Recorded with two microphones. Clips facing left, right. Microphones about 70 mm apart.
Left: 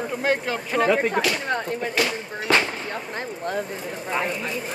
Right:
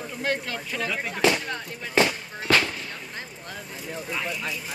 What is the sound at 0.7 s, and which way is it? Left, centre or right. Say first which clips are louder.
Speech: left 11 dB; left.